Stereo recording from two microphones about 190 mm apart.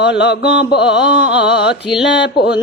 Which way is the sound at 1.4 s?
60° left (ahead or behind).